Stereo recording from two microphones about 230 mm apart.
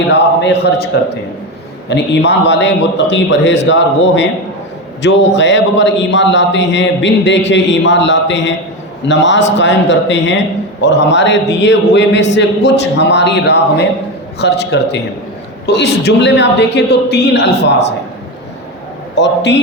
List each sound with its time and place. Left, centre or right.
0.1 s a man's voice: left
19.1 s a man's voice: left